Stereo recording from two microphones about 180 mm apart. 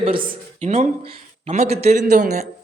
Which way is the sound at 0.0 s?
30° right (ahead or behind).